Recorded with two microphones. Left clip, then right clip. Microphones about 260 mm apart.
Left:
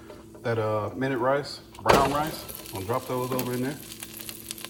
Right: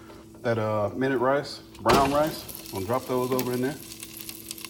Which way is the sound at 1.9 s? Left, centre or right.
Left.